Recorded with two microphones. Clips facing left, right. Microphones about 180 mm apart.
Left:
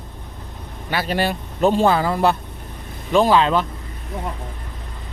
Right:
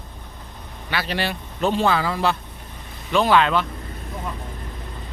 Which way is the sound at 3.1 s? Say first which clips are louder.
Left 2 dB; 35° left (ahead or behind).